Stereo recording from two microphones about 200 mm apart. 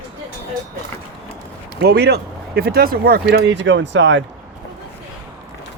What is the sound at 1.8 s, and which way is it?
Speech, 55° right (ahead or behind).